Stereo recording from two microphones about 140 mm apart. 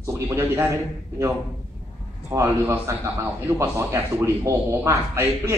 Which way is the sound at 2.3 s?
20° right (ahead or behind).